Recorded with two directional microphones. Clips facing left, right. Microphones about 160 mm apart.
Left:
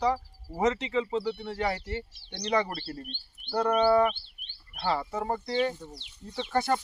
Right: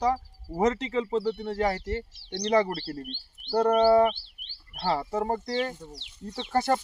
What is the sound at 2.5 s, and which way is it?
Speech, 30° right (ahead or behind).